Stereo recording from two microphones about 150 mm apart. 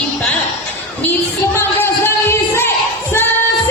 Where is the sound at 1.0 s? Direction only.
15° left (ahead or behind).